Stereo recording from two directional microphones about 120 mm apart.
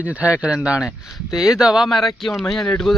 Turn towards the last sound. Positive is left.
turn(degrees=5)  # may be behind; listen again after turning